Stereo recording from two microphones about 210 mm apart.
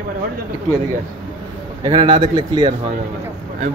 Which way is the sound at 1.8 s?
20° right (ahead or behind).